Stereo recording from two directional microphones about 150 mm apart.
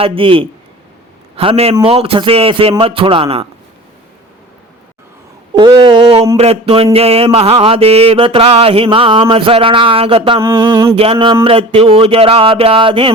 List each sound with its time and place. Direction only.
0.0 s mantra: 35° right (ahead or behind)
5.5 s speech: 30° right (ahead or behind)
5.8 s mantra: 40° right (ahead or behind)
10.4 s a sound: 20° right (ahead or behind)
10.9 s mantra: 40° right (ahead or behind)